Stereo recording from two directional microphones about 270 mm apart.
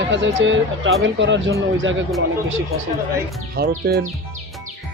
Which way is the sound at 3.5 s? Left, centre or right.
Right.